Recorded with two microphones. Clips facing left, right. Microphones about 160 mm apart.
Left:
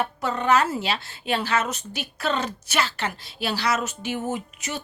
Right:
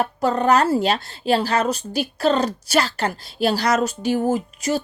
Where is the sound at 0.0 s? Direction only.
35° right (ahead or behind).